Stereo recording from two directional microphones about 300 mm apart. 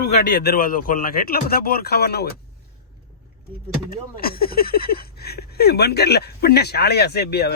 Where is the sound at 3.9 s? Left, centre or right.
Left.